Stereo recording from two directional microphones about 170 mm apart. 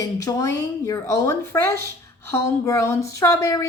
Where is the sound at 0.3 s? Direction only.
20° left (ahead or behind).